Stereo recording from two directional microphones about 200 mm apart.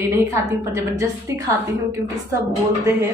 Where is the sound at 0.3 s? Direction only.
15° right (ahead or behind).